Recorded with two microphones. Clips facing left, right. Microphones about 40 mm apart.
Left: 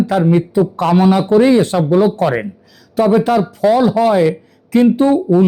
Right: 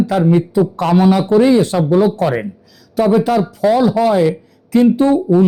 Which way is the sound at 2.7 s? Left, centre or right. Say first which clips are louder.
Left 1 dB; left.